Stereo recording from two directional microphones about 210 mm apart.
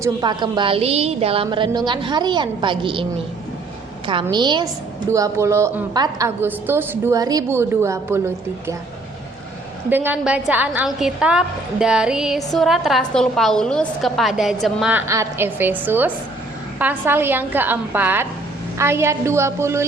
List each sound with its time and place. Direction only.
0.0 s a woman's voice: 20° right (ahead or behind)
9.9 s a woman's voice: 10° right (ahead or behind)